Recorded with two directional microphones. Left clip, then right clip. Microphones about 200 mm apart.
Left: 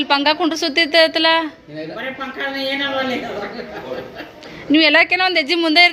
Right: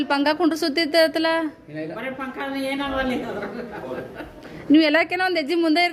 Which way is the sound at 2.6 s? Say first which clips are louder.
Left 4 dB; 25° right (ahead or behind).